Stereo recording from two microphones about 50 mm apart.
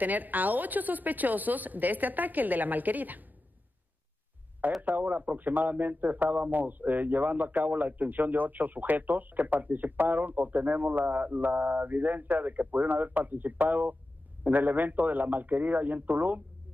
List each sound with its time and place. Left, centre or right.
0.0 s a man's voice: right
4.8 s a man's voice: right